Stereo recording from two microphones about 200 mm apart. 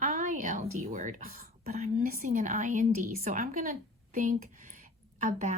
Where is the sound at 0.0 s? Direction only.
40° right (ahead or behind).